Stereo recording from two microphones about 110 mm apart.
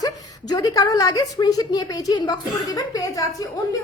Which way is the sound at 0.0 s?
35° left (ahead or behind).